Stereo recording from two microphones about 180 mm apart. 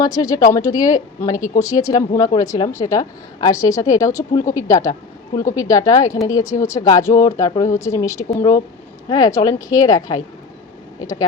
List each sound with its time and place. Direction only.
0.0 s speech: 20° left (ahead or behind)